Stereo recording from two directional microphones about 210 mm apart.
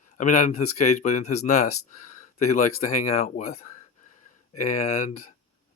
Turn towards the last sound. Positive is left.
turn(degrees=30)  # may be behind; listen again after turning